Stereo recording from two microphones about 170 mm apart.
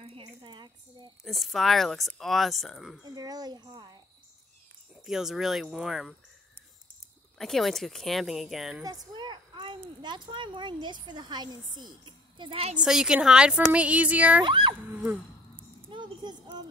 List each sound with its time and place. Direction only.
0.0 s a sound: 30° right (ahead or behind)
1.2 s speech: centre (ahead or behind)
3.0 s speech: 20° right (ahead or behind)
5.0 s speech: centre (ahead or behind)
7.3 s speech: centre (ahead or behind)
8.8 s a sound: 25° right (ahead or behind)
9.8 s speech: 25° right (ahead or behind)
12.7 s speech: 5° right (ahead or behind)
13.7 s female singing: 10° right (ahead or behind)
14.4 s speech: 30° right (ahead or behind)
15.9 s a child's voice: 25° right (ahead or behind)